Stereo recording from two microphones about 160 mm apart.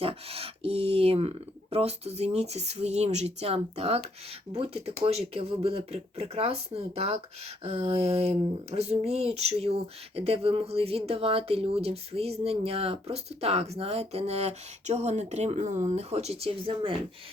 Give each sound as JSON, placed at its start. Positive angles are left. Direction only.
{"t": 0.0, "sound": "speech", "side_deg": -35}